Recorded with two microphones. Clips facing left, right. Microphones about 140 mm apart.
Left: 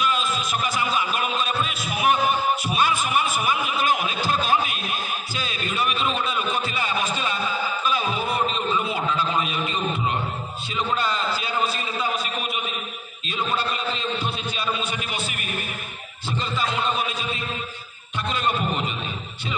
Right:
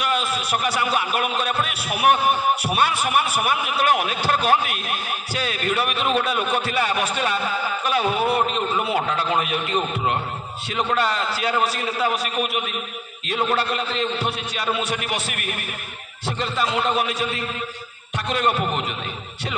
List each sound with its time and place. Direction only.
0.0 s a man's voice: 65° right (ahead or behind)